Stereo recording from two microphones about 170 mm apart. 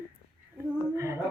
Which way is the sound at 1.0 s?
15° right (ahead or behind).